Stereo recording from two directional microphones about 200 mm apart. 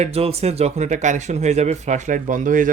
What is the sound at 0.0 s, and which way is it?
Speech, 30° right (ahead or behind).